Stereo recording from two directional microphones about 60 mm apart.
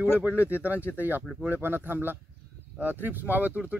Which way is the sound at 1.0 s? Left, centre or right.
Right.